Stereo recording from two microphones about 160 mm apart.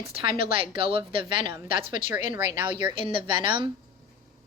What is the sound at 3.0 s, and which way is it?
Speech, 30° right (ahead or behind).